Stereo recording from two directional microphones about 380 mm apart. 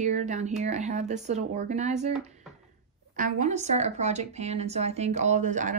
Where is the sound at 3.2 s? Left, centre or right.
Centre.